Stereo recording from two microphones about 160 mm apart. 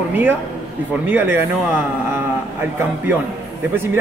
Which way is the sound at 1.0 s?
10° right (ahead or behind).